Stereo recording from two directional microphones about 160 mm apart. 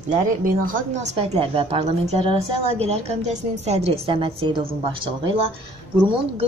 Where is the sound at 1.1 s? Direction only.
35° right (ahead or behind).